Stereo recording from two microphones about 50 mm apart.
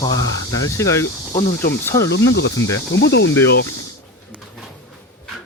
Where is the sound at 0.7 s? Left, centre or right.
Left.